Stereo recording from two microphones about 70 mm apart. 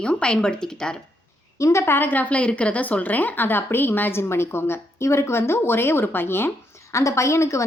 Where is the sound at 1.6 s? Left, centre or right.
Left.